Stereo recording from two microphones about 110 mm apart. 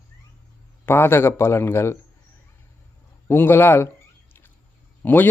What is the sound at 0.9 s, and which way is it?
Speech, 20° left (ahead or behind).